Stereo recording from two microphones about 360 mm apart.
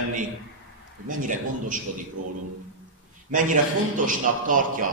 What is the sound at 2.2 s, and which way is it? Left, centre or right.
Speech, right.